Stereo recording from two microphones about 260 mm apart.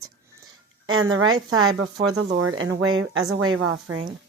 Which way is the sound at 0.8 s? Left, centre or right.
Right.